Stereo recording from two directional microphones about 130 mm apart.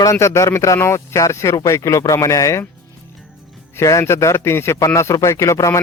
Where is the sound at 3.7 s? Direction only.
25° left (ahead or behind).